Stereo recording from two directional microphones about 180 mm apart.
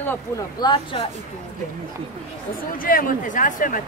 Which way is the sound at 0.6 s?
25° left (ahead or behind).